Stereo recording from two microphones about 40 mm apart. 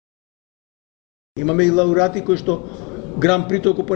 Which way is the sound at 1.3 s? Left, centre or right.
Centre.